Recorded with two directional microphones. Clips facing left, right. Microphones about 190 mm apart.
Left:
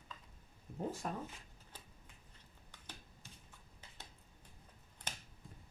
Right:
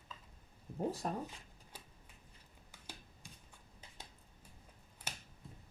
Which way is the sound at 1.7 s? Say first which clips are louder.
Right 2 dB; 10° right (ahead or behind).